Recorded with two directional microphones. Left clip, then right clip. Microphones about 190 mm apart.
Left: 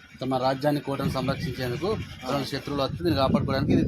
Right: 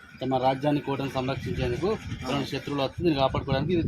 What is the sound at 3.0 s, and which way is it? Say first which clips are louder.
Speech: even; 35° left (ahead or behind).